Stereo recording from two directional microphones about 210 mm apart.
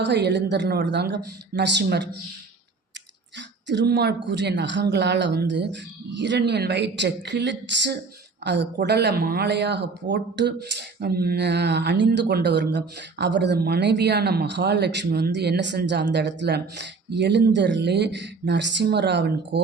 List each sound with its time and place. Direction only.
0.0 s speech: 55° right (ahead or behind)
3.3 s speech: 55° right (ahead or behind)